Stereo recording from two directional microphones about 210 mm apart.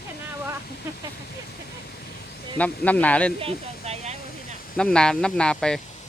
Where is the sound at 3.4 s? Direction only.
30° right (ahead or behind).